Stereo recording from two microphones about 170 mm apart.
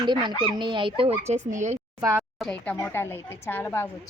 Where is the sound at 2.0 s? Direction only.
15° right (ahead or behind).